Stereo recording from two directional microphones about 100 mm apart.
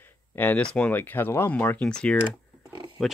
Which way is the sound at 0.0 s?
20° left (ahead or behind).